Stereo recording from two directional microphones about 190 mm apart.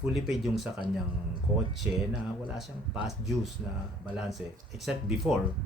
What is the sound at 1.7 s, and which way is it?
Speech, centre (ahead or behind).